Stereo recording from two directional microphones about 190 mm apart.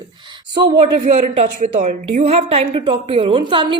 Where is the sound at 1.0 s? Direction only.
40° right (ahead or behind).